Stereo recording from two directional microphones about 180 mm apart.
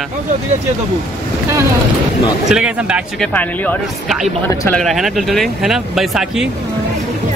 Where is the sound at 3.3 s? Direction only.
10° left (ahead or behind).